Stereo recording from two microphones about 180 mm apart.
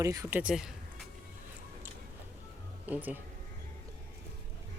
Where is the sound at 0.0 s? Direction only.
20° right (ahead or behind).